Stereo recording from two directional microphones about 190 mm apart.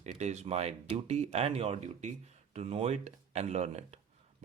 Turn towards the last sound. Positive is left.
turn(degrees=-35)  # may be behind; listen again after turning